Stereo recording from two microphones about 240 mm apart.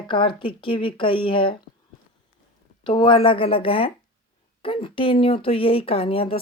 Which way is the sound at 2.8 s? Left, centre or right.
Centre.